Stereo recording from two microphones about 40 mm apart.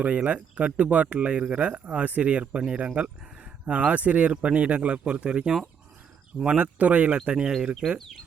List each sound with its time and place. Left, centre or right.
0.0 s speech: right
6.6 s speech: right
7.3 s speech: right
7.9 s speech: centre